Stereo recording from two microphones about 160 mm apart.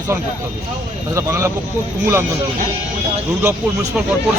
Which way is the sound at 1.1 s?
20° right (ahead or behind).